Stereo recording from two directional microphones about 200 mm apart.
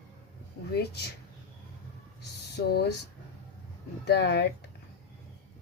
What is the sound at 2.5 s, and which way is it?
Speech, 55° left (ahead or behind).